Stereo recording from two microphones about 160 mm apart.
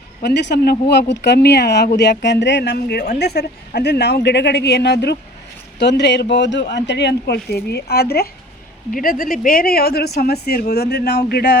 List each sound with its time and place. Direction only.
0.2 s speech: 85° left
8.9 s speech: 60° left (ahead or behind); by 11.5 s 85° left